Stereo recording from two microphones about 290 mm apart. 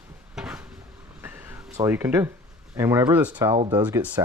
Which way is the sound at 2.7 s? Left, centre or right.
Centre.